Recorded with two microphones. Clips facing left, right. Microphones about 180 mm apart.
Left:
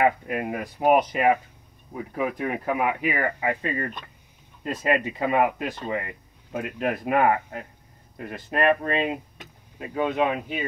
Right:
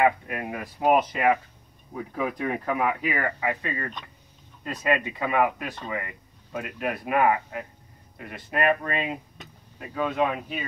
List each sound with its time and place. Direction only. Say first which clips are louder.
0.3 s speech: left 4 dB; 20° left (ahead or behind)
4.8 s speech: left 2 dB; 30° left (ahead or behind)
9.4 s speech: left 3 dB; 20° left (ahead or behind)